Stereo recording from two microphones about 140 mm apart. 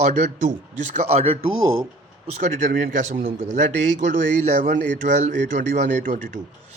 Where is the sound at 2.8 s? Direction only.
60° right (ahead or behind).